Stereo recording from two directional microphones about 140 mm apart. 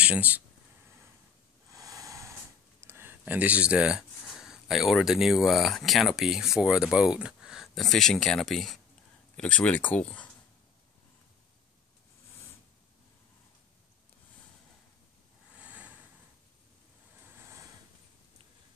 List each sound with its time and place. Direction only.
0.0 s speech: 10° right (ahead or behind)
1.7 s a sound: 25° right (ahead or behind)
2.8 s speech: 15° right (ahead or behind); by 10.3 s 10° left (ahead or behind)
15.5 s vehicle: 10° right (ahead or behind)